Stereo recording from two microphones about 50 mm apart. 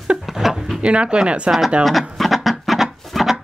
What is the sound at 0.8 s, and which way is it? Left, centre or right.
Speech, right.